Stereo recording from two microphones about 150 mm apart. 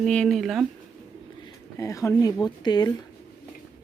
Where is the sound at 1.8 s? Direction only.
20° left (ahead or behind).